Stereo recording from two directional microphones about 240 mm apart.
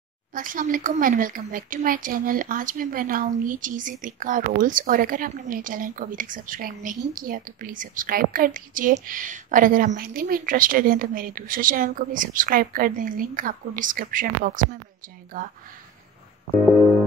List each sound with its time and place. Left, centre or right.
0.3 s a woman's voice: right